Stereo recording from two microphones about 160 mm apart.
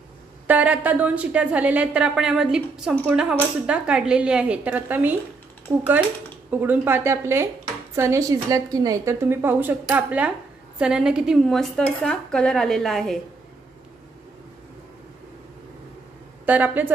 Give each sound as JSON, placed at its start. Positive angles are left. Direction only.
{"t": 0.5, "sound": "speech", "side_deg": -10}
{"t": 5.7, "sound": "speech", "side_deg": -20}
{"t": 16.4, "sound": "speech", "side_deg": -10}